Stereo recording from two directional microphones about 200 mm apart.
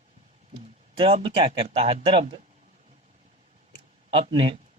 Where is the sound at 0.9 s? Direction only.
25° right (ahead or behind).